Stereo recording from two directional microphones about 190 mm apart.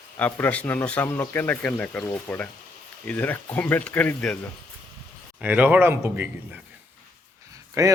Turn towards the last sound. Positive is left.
turn(degrees=-15)  # may be behind; listen again after turning